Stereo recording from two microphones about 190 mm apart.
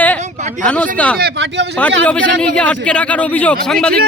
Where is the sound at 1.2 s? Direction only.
65° right (ahead or behind).